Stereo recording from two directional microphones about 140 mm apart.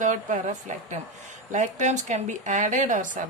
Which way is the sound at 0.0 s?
65° right (ahead or behind).